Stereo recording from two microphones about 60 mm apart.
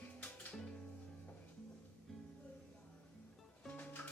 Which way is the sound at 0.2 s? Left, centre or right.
Left.